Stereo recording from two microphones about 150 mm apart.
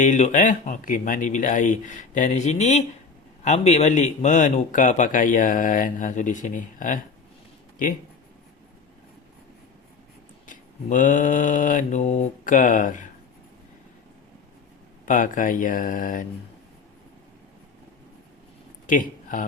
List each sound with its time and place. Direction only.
0.0 s a man's voice: 55° left (ahead or behind)
10.4 s a man's voice: 60° left (ahead or behind)
15.0 s a man's voice: 60° left (ahead or behind)
18.9 s speech: 60° left (ahead or behind)